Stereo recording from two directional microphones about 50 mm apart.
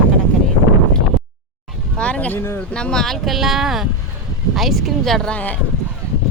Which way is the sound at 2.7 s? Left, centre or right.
Centre.